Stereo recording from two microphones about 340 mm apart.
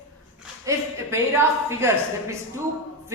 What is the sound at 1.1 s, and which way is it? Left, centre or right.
Speech, centre.